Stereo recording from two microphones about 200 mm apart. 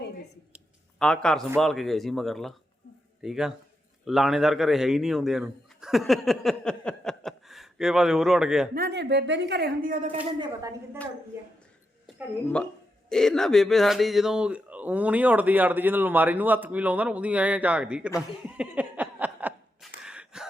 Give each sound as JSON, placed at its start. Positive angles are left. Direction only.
{"t": 0.9, "sound": "a man's voice", "side_deg": 5}
{"t": 8.7, "sound": "a woman's voice", "side_deg": -50}
{"t": 10.3, "sound": "a woman's voice", "side_deg": -20}
{"t": 12.0, "sound": "speech", "side_deg": 5}
{"t": 18.4, "sound": "a sound", "side_deg": -5}